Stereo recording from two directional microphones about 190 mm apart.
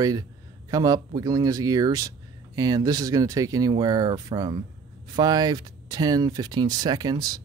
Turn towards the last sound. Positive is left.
turn(degrees=-20)  # may be behind; listen again after turning